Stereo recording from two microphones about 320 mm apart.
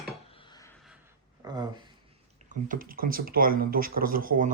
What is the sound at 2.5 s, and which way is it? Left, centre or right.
Speech, right.